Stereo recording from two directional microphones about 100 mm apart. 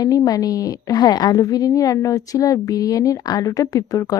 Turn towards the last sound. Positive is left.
turn(degrees=35)  # may be behind; listen again after turning